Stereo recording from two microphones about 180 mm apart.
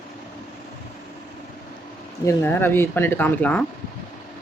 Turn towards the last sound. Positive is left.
turn(degrees=10)  # may be behind; listen again after turning